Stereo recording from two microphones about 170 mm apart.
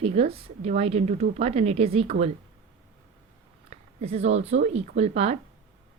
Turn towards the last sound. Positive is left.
turn(degrees=-40)  # may be behind; listen again after turning